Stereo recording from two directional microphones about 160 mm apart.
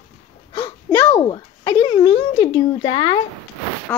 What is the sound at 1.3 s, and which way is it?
Speech, 25° left (ahead or behind).